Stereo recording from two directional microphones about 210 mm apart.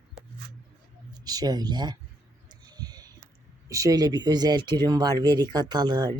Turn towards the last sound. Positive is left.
turn(degrees=-20)  # may be behind; listen again after turning